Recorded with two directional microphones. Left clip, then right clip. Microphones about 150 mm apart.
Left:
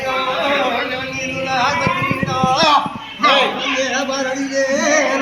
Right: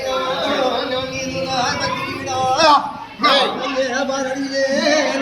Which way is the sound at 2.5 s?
15° right (ahead or behind).